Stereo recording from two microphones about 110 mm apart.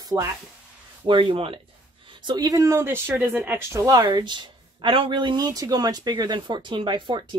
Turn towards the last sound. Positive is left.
turn(degrees=-45)  # may be behind; listen again after turning